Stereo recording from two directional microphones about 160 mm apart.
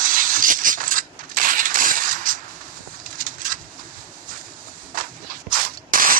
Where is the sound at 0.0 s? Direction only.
55° right (ahead or behind).